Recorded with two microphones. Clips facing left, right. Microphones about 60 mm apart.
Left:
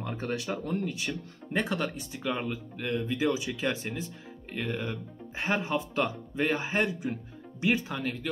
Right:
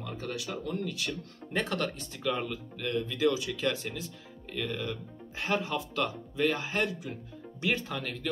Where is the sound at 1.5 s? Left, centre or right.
Centre.